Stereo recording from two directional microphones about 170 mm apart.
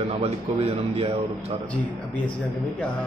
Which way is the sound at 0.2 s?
35° right (ahead or behind).